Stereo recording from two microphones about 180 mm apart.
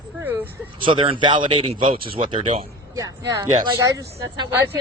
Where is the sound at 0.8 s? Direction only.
30° right (ahead or behind).